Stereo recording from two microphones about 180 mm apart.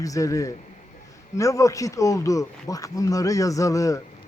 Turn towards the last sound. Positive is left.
turn(degrees=15)  # may be behind; listen again after turning